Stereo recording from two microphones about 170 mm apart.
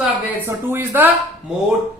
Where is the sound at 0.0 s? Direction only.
15° right (ahead or behind).